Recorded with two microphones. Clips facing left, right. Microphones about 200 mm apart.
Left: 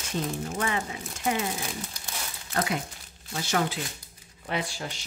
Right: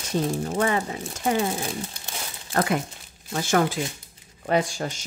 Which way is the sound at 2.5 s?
55° right (ahead or behind).